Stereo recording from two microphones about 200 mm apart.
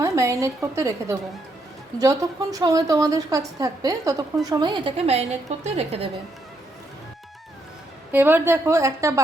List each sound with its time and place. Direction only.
0.0 s a woman's voice: 15° right (ahead or behind); by 6.1 s 30° right (ahead or behind)
8.1 s a woman's voice: 10° right (ahead or behind)